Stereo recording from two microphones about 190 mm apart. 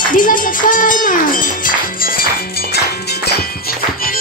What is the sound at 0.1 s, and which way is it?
Speech, 45° left (ahead or behind).